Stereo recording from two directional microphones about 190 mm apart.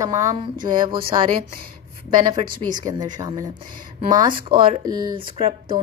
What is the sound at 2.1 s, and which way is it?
Speech, 25° right (ahead or behind).